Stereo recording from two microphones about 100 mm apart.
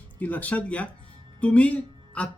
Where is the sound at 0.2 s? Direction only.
15° left (ahead or behind).